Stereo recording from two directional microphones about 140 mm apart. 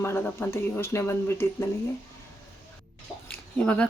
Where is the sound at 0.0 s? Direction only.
15° left (ahead or behind).